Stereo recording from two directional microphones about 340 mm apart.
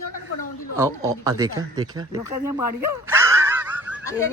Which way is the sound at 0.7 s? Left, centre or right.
Centre.